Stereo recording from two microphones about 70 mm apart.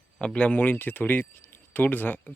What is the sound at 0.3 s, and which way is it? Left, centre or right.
Speech, left.